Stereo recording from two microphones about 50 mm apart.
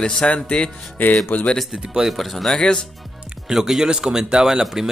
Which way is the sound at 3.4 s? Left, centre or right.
Centre.